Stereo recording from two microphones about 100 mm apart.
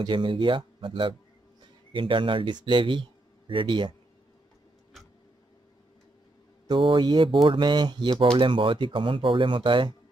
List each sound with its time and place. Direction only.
0.0 s a man's voice: 55° right (ahead or behind)
7.0 s speech: 45° right (ahead or behind)